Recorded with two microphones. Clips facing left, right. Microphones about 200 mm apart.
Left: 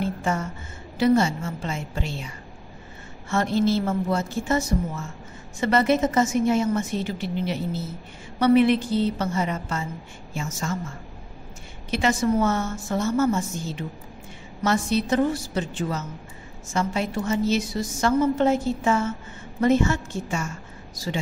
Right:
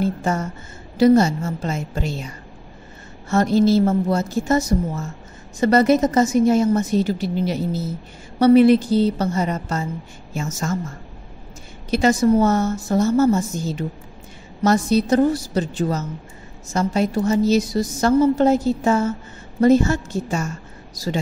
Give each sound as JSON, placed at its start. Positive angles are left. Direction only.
{"t": 0.0, "sound": "a woman's voice", "side_deg": -40}